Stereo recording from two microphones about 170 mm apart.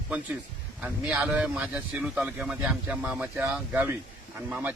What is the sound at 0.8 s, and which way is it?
A man's voice, 5° right (ahead or behind).